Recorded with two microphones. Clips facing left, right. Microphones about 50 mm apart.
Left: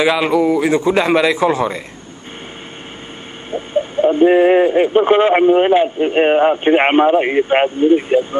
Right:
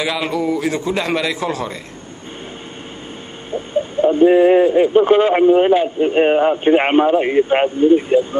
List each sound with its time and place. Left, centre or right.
0.0 s speech: left
4.0 s speech: left